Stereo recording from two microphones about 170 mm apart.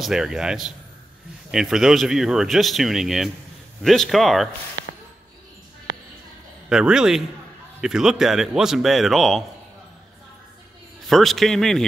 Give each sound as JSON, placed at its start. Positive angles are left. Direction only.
{"t": 0.0, "sound": "speech", "side_deg": -5}
{"t": 6.7, "sound": "speech", "side_deg": -5}
{"t": 11.1, "sound": "speech", "side_deg": 0}